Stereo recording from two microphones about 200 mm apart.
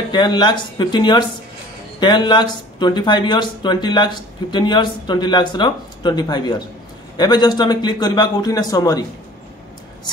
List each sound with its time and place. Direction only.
0.1 s speech: 20° left (ahead or behind)